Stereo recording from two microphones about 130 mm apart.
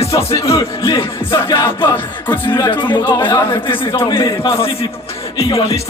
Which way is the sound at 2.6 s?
35° left (ahead or behind).